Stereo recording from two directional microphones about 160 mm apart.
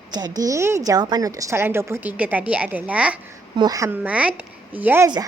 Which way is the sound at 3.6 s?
20° right (ahead or behind).